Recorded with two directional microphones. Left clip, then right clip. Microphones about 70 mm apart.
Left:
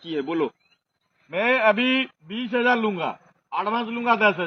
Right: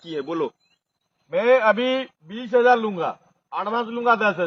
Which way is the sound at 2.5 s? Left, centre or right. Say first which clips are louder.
Right 4 dB; right.